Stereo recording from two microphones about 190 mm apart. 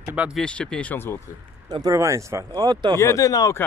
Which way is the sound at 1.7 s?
20° right (ahead or behind).